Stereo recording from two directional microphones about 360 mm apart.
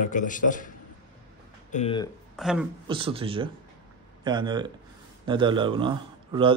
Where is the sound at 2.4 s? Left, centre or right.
Centre.